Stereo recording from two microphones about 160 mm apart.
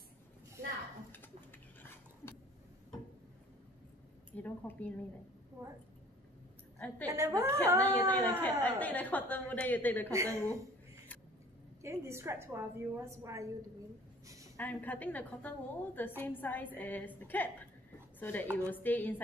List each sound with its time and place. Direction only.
4.3 s a woman's voice: 10° left (ahead or behind)
5.6 s a woman's voice: 15° right (ahead or behind)
7.1 s a woman's voice: 20° right (ahead or behind)
7.8 s a woman's voice: 10° left (ahead or behind)
10.3 s a woman's voice: 20° right (ahead or behind)
11.8 s a woman's voice: 15° right (ahead or behind)
14.2 s a sound: 20° right (ahead or behind)
14.6 s a woman's voice: 10° left (ahead or behind)